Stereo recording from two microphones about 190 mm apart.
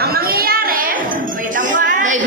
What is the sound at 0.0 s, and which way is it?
Children playing, 50° right (ahead or behind).